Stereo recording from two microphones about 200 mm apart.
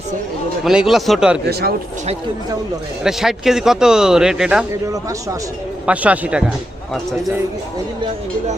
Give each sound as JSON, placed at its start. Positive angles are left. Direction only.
{"t": 0.6, "sound": "speech", "side_deg": 0}
{"t": 1.5, "sound": "speech", "side_deg": -55}
{"t": 3.0, "sound": "speech", "side_deg": 0}
{"t": 4.7, "sound": "a man's voice", "side_deg": -15}